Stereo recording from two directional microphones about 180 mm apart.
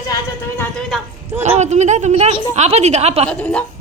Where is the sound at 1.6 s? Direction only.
40° right (ahead or behind).